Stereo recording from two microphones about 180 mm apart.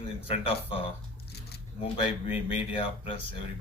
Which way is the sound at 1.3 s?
65° left (ahead or behind).